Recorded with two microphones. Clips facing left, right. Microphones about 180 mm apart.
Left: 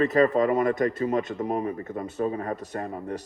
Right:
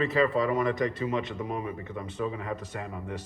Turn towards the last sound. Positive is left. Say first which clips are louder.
# left 5 dB
turn(degrees=40)  # may be behind; listen again after turning